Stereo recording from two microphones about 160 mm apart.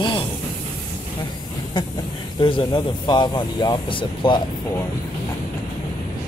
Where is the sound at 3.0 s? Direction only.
25° left (ahead or behind).